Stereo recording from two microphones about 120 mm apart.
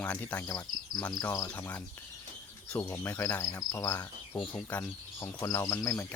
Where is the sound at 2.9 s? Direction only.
25° left (ahead or behind).